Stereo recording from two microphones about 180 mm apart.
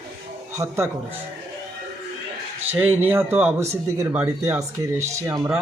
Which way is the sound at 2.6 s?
10° right (ahead or behind).